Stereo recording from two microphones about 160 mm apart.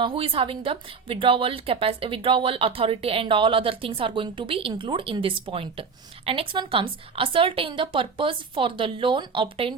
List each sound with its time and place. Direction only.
0.0 s a woman's voice: 35° right (ahead or behind)